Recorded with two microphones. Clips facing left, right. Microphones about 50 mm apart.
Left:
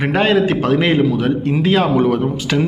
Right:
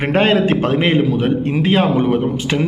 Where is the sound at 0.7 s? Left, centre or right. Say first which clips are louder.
Left 1 dB; right.